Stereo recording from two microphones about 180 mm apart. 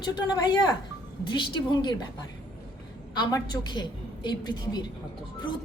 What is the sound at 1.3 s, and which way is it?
Speech, 25° left (ahead or behind).